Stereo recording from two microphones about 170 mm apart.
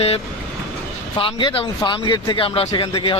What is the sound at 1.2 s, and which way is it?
A man's voice, 30° left (ahead or behind).